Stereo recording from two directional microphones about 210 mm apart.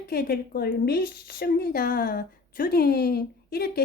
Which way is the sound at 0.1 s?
45° left (ahead or behind).